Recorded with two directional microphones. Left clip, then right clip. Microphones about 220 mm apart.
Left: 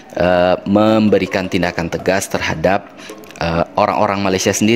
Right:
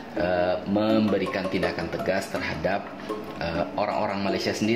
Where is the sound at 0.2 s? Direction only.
50° left (ahead or behind).